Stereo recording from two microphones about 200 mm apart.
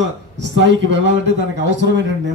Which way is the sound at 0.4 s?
65° right (ahead or behind).